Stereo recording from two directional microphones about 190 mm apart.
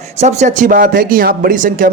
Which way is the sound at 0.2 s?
35° right (ahead or behind).